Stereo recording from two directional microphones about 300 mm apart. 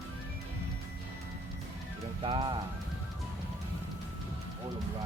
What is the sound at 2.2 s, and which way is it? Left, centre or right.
Speech, centre.